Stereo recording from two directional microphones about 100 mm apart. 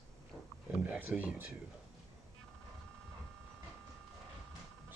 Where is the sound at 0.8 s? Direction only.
15° right (ahead or behind).